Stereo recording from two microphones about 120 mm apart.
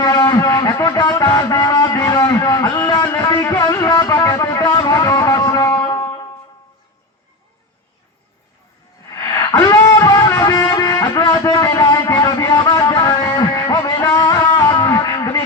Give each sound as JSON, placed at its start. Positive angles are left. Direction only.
{"t": 0.0, "sound": "music", "side_deg": 25}
{"t": 9.0, "sound": "music", "side_deg": 25}
{"t": 14.2, "sound": "a sound", "side_deg": 30}